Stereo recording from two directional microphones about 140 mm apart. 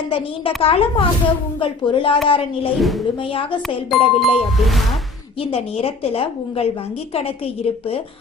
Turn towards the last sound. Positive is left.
turn(degrees=45)  # may be behind; listen again after turning